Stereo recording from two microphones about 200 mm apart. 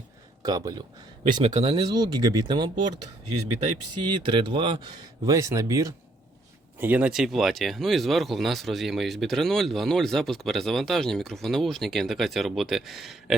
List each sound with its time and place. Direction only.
0.4 s speech: 20° right (ahead or behind)
3.2 s speech: 90° right
4.1 s speech: 25° right (ahead or behind); by 13.3 s centre (ahead or behind)